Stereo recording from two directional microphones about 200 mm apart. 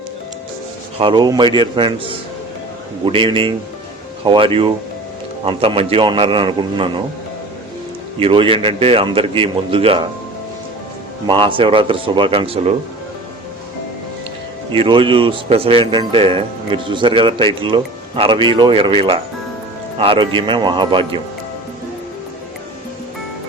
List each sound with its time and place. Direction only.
0.9 s speech: 25° right (ahead or behind)
8.2 s speech: 25° right (ahead or behind)
11.3 s speech: 25° right (ahead or behind)
14.8 s speech: 25° right (ahead or behind)